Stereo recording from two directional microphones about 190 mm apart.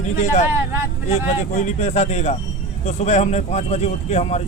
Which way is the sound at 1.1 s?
35° left (ahead or behind).